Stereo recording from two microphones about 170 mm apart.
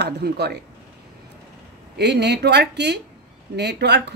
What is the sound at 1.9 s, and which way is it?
A woman's voice, 80° right.